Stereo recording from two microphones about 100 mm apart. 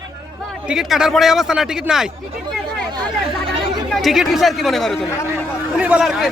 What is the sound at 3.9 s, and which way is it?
A man's voice, centre (ahead or behind).